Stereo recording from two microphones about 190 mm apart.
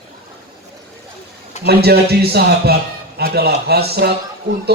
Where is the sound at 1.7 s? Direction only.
55° right (ahead or behind).